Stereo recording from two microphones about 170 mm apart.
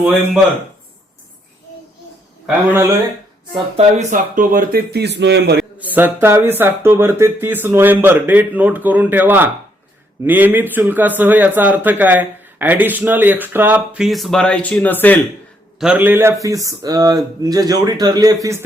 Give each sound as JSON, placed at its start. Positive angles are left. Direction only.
{"t": 2.6, "sound": "speech", "side_deg": -15}
{"t": 3.8, "sound": "speech", "side_deg": -45}
{"t": 5.5, "sound": "speech", "side_deg": -10}
{"t": 15.8, "sound": "a man's voice", "side_deg": -10}